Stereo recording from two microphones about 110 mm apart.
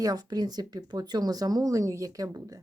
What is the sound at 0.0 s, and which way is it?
Speech, 35° right (ahead or behind).